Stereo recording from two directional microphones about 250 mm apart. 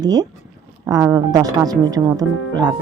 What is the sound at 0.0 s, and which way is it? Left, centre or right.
Speech, centre.